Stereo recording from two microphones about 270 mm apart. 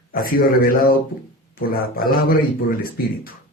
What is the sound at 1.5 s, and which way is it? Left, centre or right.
Speech, left.